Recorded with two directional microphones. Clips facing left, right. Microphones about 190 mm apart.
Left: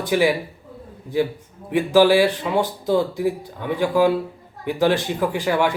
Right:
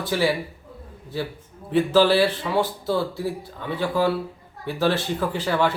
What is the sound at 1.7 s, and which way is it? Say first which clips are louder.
Speech: left 3 dB; 10° left (ahead or behind).